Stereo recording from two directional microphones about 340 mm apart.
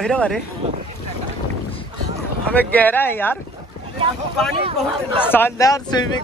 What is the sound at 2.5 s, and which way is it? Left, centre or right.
Speech, centre.